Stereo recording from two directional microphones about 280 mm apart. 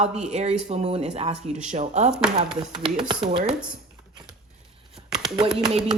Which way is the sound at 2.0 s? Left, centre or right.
Centre.